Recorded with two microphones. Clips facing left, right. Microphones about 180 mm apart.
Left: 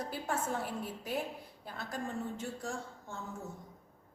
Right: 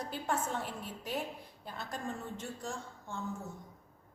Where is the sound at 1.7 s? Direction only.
Centre (ahead or behind).